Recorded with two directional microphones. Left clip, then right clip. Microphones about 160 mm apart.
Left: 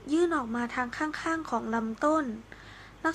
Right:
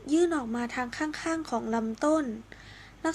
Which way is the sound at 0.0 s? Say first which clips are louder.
Right 1 dB; 30° right (ahead or behind).